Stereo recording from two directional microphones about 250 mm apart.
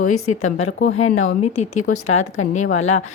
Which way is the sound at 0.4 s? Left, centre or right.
Left.